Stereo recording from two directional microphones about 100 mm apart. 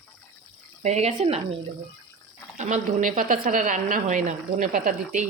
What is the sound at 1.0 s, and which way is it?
Speech, 90° right.